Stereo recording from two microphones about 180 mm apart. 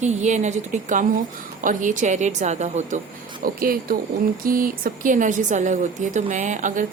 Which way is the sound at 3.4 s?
55° right (ahead or behind).